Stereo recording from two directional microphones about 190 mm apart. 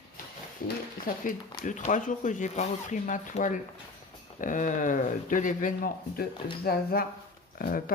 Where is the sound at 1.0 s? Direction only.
45° left (ahead or behind).